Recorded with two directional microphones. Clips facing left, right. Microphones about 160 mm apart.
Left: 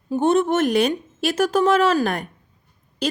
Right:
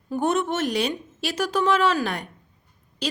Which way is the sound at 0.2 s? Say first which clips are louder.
Left 5 dB; 30° left (ahead or behind).